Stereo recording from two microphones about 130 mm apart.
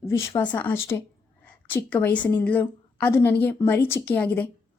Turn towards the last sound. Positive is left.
turn(degrees=15)  # may be behind; listen again after turning